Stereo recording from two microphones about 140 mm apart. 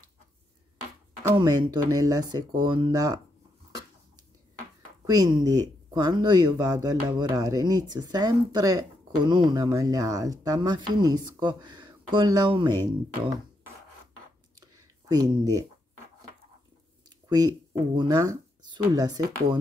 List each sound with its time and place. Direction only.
1.2 s speech: 30° right (ahead or behind)
5.0 s speech: 30° right (ahead or behind)
14.6 s a sound: 25° right (ahead or behind)
17.9 s speech: 25° right (ahead or behind)